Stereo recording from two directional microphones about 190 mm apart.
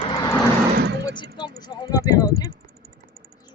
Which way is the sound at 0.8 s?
60° right (ahead or behind).